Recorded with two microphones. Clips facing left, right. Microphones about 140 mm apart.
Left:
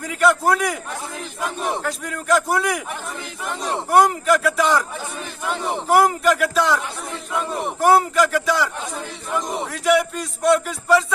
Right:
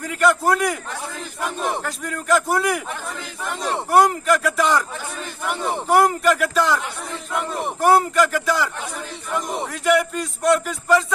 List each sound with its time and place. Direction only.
0.0 s a man's voice: centre (ahead or behind)
1.8 s a man's voice: centre (ahead or behind)
3.4 s speech: 15° left (ahead or behind)
3.9 s a man's voice: centre (ahead or behind)
5.9 s a man's voice: centre (ahead or behind)
7.8 s a man's voice: centre (ahead or behind)
9.7 s a man's voice: centre (ahead or behind)